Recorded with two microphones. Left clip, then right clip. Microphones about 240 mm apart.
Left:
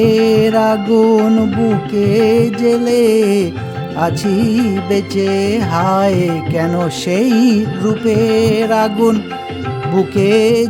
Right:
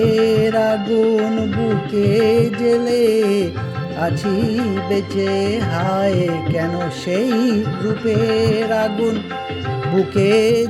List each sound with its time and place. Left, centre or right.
0.0 s music: centre
10.2 s music: centre